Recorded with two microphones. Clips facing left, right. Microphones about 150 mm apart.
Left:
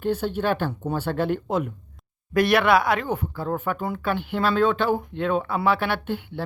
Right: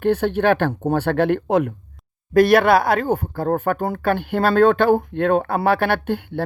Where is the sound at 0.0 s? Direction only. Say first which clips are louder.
Right 6 dB; 70° right (ahead or behind).